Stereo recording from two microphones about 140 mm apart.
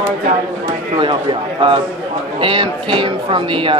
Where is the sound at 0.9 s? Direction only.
35° right (ahead or behind).